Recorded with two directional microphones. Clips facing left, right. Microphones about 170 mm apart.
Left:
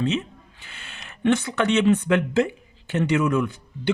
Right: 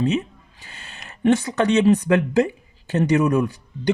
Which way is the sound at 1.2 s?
40° right (ahead or behind).